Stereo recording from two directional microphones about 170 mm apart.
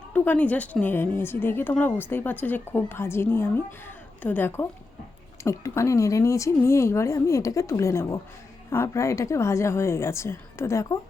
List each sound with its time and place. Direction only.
0.1 s a woman's voice: 10° left (ahead or behind)